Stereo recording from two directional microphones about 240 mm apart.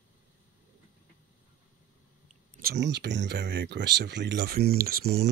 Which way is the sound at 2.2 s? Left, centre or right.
Right.